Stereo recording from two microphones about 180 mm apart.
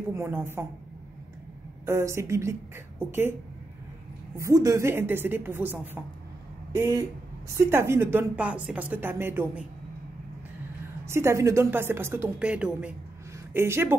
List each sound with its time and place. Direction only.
0.1 s speech: 10° right (ahead or behind)
1.9 s speech: 15° right (ahead or behind)
4.4 s speech: 15° right (ahead or behind)
7.5 s speech: 15° right (ahead or behind)
11.1 s speech: 15° right (ahead or behind)